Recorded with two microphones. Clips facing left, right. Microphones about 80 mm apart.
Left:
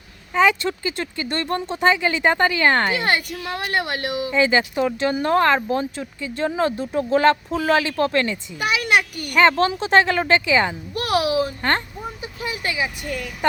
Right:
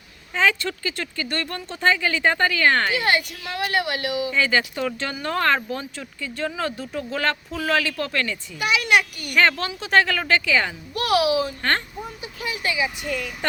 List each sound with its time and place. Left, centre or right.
0.3 s speech: centre; by 4.1 s left
4.3 s speech: left
5.1 s speech: left
5.4 s speech: centre
8.6 s a child's voice: left
9.3 s speech: left
9.6 s speech: left
11.0 s speech: left
12.2 s vehicle: left